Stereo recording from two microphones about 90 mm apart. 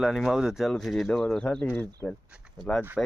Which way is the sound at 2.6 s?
55° right (ahead or behind).